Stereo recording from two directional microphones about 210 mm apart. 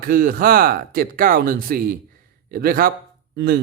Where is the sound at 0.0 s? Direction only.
45° right (ahead or behind).